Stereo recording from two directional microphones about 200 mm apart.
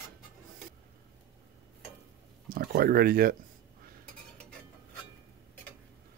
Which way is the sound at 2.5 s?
50° right (ahead or behind).